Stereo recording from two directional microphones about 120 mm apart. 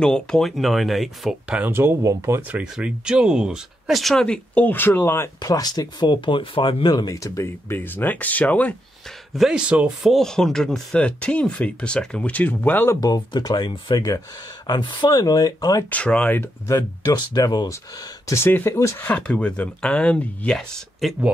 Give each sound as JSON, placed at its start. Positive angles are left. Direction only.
{"t": 0.0, "sound": "speech", "side_deg": 5}
{"t": 1.6, "sound": "speech", "side_deg": -20}
{"t": 2.6, "sound": "speech", "side_deg": -5}
{"t": 9.3, "sound": "speech", "side_deg": -5}
{"t": 10.1, "sound": "speech", "side_deg": 5}
{"t": 13.0, "sound": "speech", "side_deg": 35}
{"t": 15.9, "sound": "speech", "side_deg": 10}
{"t": 18.2, "sound": "speech", "side_deg": 20}
{"t": 19.0, "sound": "speech", "side_deg": 10}